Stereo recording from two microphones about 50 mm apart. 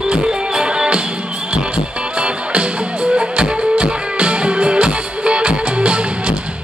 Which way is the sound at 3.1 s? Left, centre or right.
Right.